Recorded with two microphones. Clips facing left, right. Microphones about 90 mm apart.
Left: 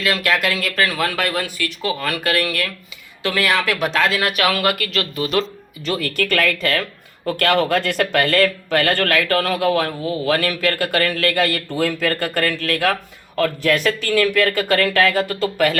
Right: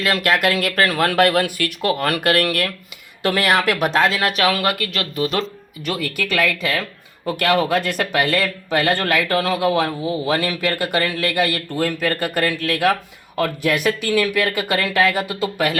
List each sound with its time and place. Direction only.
0.0 s speech: 45° right (ahead or behind)
4.0 s speech: centre (ahead or behind)
4.4 s speech: 25° right (ahead or behind)
5.9 s speech: 10° right (ahead or behind)